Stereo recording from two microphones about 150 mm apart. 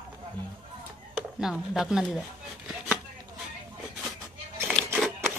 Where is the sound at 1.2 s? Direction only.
5° right (ahead or behind).